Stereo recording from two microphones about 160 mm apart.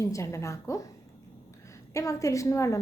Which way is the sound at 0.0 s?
20° left (ahead or behind).